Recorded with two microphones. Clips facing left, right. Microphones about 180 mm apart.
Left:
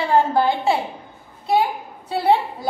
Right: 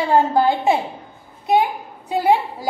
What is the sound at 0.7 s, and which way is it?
A woman's voice, 20° right (ahead or behind).